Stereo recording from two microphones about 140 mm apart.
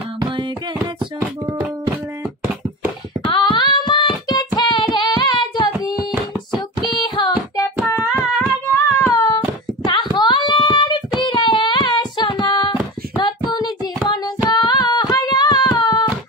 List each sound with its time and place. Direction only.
3.3 s singing: 35° left (ahead or behind)
4.6 s child singing: 30° left (ahead or behind)
7.0 s child singing: 30° left (ahead or behind)
7.6 s hands: 15° left (ahead or behind)
8.0 s a sound: centre (ahead or behind)
8.6 s a sound: 20° left (ahead or behind)
11.2 s child singing: 35° left (ahead or behind)
14.5 s hands: 30° left (ahead or behind)